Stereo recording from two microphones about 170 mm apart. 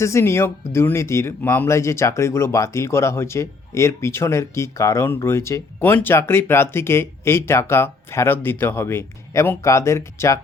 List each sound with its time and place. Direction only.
0.0 s speech: 15° left (ahead or behind)